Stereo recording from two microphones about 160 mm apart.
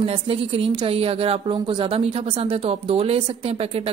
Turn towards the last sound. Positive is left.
turn(degrees=-40)  # may be behind; listen again after turning